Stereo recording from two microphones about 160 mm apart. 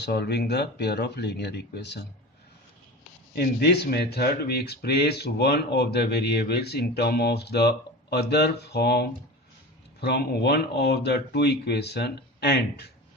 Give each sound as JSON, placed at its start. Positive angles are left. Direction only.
{"t": 0.0, "sound": "speech", "side_deg": 90}
{"t": 3.3, "sound": "speech", "side_deg": 85}